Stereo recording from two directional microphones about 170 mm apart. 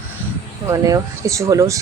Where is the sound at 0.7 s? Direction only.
20° right (ahead or behind).